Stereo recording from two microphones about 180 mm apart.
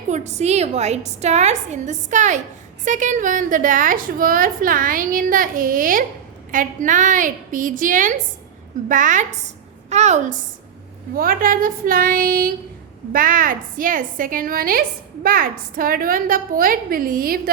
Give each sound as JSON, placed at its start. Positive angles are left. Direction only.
{"t": 0.1, "sound": "a woman's voice", "side_deg": -40}